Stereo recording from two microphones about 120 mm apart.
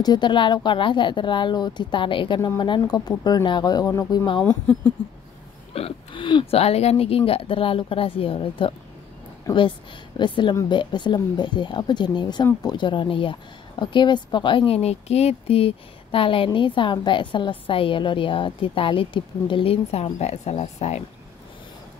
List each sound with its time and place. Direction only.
0.0 s speech: 35° left (ahead or behind)
4.4 s speech: 15° left (ahead or behind)
5.7 s a woman's voice: 50° left (ahead or behind)
6.6 s a woman's voice: 60° left (ahead or behind); by 14.8 s 40° left (ahead or behind)
14.8 s a woman's voice: 60° left (ahead or behind)